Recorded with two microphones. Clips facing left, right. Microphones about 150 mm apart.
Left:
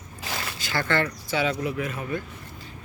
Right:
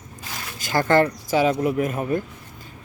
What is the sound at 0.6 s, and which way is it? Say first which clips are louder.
Speech: right 8 dB; 45° right (ahead or behind).